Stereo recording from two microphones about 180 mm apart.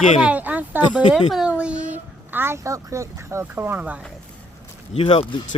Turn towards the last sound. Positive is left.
turn(degrees=35)  # may be behind; listen again after turning